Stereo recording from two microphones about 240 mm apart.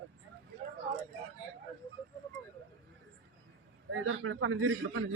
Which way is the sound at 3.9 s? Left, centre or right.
Right.